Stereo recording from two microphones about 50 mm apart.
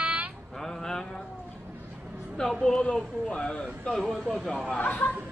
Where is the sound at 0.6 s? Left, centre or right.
Centre.